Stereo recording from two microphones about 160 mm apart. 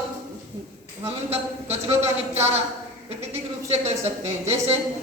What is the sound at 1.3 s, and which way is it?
Speech, 40° right (ahead or behind).